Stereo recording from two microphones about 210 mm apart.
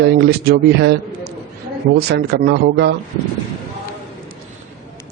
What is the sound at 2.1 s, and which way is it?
Speech, 50° right (ahead or behind).